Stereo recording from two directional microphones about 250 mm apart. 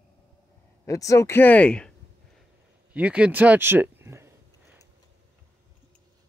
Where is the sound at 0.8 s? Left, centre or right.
Centre.